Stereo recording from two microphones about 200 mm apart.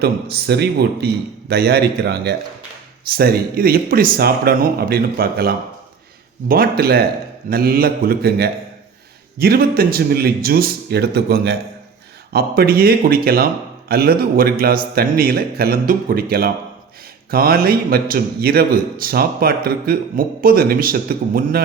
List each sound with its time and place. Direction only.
0.0 s a man's voice: 55° right (ahead or behind)